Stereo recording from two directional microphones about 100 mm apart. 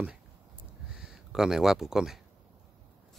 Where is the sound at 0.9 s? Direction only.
5° right (ahead or behind).